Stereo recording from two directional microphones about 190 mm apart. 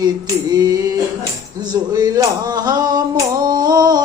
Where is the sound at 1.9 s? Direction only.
20° right (ahead or behind).